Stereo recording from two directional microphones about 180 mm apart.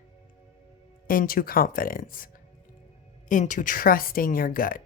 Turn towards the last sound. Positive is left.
turn(degrees=50)  # may be behind; listen again after turning